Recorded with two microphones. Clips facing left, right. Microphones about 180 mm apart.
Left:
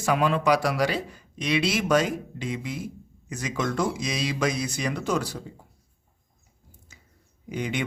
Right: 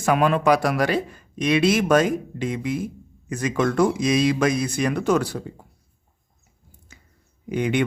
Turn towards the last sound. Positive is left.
turn(degrees=-60)  # may be behind; listen again after turning